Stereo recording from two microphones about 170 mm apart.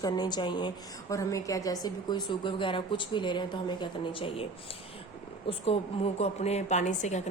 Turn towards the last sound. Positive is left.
turn(degrees=45)  # may be behind; listen again after turning